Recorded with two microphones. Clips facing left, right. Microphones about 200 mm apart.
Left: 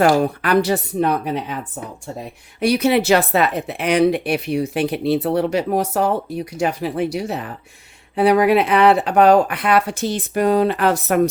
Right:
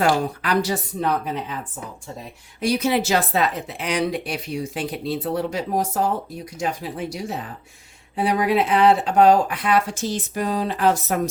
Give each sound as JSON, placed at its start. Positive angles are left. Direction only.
{"t": 0.0, "sound": "speech", "side_deg": 60}
{"t": 2.6, "sound": "speech", "side_deg": 65}